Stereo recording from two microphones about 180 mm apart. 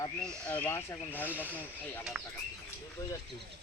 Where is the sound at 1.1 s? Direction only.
10° right (ahead or behind).